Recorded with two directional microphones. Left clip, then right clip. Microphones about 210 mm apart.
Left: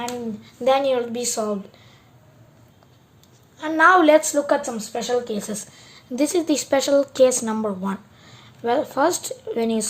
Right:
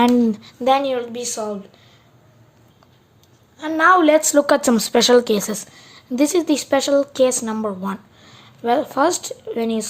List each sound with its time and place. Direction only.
0.6 s a woman's voice: 5° right (ahead or behind)
3.6 s a woman's voice: 5° right (ahead or behind)
4.4 s speech: 40° right (ahead or behind)
5.5 s a woman's voice: 10° right (ahead or behind)